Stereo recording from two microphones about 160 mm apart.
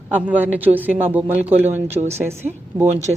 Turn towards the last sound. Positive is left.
turn(degrees=-45)  # may be behind; listen again after turning